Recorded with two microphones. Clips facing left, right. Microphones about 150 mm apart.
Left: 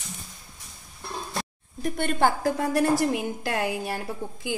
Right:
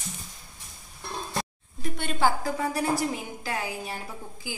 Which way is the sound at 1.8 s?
55° left (ahead or behind).